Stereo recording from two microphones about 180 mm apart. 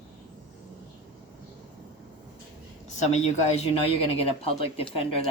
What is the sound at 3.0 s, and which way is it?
Speech, 40° left (ahead or behind).